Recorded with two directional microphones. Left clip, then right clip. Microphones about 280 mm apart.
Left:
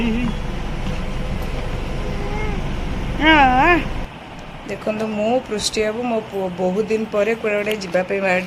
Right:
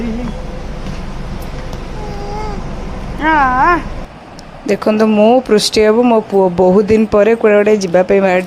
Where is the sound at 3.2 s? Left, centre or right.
Centre.